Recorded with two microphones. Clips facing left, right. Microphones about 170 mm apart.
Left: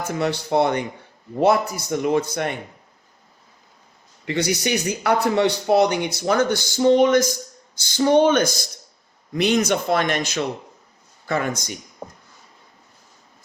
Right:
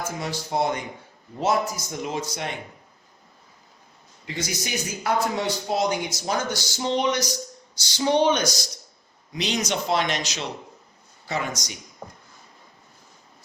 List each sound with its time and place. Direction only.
0.0 s speech: 65° left (ahead or behind)
4.3 s speech: 65° left (ahead or behind)
12.0 s a sound: 15° left (ahead or behind)